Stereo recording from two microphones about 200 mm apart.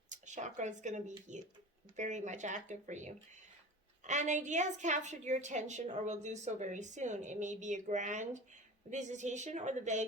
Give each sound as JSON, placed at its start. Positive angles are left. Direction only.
{"t": 0.1, "sound": "a woman's voice", "side_deg": -40}